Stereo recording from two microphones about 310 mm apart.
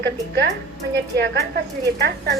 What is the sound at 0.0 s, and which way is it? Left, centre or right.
Speech, right.